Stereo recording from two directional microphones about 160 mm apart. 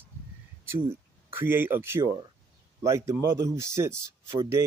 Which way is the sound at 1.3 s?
15° right (ahead or behind).